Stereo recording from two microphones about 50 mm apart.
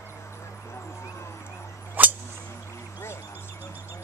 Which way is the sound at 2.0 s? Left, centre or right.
Right.